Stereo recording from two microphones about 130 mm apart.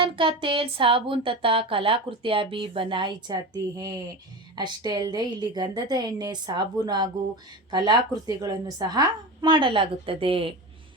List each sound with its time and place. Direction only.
0.0 s a woman's voice: 40° right (ahead or behind)